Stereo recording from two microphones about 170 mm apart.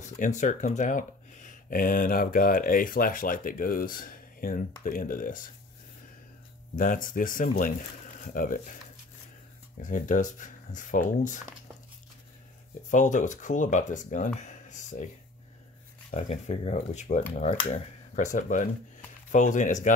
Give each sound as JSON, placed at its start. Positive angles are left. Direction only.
{"t": 0.0, "sound": "speech", "side_deg": 45}
{"t": 6.7, "sound": "speech", "side_deg": 55}
{"t": 9.8, "sound": "speech", "side_deg": 50}
{"t": 12.9, "sound": "speech", "side_deg": 45}
{"t": 16.1, "sound": "speech", "side_deg": 40}